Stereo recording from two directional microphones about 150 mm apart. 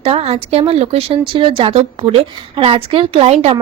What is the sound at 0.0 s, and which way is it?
Speech, 40° right (ahead or behind).